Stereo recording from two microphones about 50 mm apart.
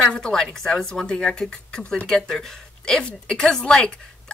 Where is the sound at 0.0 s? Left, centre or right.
Centre.